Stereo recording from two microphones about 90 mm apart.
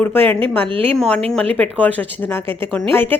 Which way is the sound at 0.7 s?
90° right.